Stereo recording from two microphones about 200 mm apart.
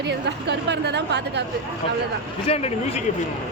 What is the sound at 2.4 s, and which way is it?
Speech, 30° left (ahead or behind).